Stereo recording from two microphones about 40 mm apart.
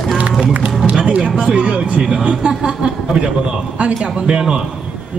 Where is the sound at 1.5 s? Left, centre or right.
Right.